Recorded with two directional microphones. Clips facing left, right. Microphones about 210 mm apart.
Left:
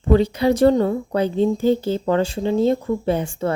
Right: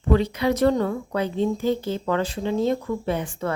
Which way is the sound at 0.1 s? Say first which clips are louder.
Left 4 dB; 30° left (ahead or behind).